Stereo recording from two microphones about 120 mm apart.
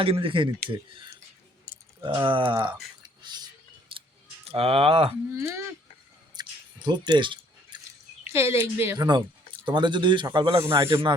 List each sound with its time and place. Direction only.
0.0 s speech: 50° right (ahead or behind)
3.2 s a sound: 35° right (ahead or behind)
4.4 s speech: 50° right (ahead or behind)
5.3 s speech: 25° right (ahead or behind)
6.3 s chewing: 40° right (ahead or behind)
8.3 s speech: 20° right (ahead or behind)
9.0 s a man's voice: 35° right (ahead or behind)